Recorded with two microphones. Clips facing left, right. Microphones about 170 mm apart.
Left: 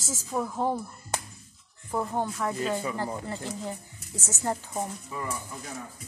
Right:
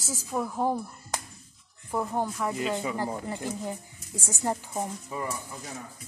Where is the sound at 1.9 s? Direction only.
10° right (ahead or behind).